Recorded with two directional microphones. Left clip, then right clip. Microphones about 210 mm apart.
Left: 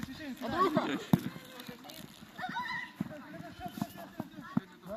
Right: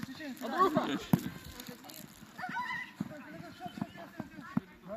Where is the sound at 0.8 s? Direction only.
45° right (ahead or behind).